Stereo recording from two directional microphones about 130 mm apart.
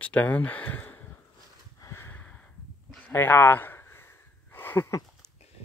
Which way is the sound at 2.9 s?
15° left (ahead or behind).